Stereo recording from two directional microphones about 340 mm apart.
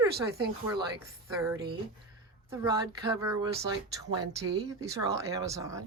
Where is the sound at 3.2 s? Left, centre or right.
Centre.